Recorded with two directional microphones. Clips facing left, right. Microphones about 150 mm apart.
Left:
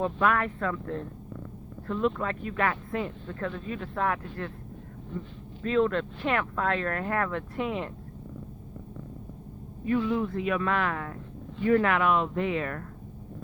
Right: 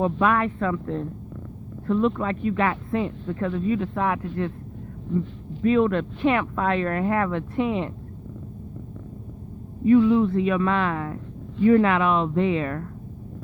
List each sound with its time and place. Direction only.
0.0 s speech: 20° right (ahead or behind)
2.0 s speech: 20° right (ahead or behind)
5.6 s speech: 15° right (ahead or behind)
9.8 s speech: 25° right (ahead or behind)